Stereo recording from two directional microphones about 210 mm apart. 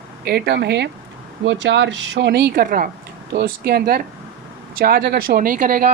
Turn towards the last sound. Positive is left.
turn(degrees=-45)  # may be behind; listen again after turning